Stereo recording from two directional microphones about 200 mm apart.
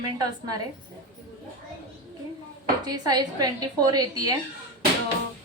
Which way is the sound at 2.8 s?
20° right (ahead or behind).